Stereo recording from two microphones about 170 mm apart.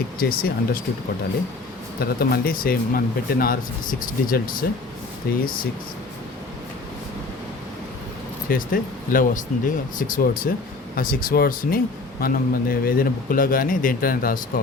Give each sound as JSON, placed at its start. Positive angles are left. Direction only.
{"t": 0.2, "sound": "speech", "side_deg": 60}
{"t": 2.0, "sound": "speech", "side_deg": 65}
{"t": 8.4, "sound": "speech", "side_deg": 55}